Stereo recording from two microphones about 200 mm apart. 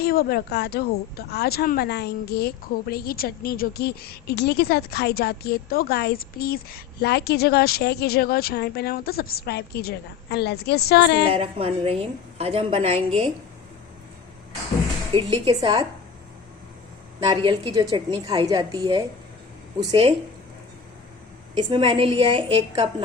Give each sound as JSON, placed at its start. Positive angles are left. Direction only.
{"t": 0.0, "sound": "a woman's voice", "side_deg": 50}
{"t": 11.3, "sound": "a woman's voice", "side_deg": -30}
{"t": 15.1, "sound": "a woman's voice", "side_deg": -25}
{"t": 17.2, "sound": "a woman's voice", "side_deg": -25}
{"t": 21.5, "sound": "a woman's voice", "side_deg": -25}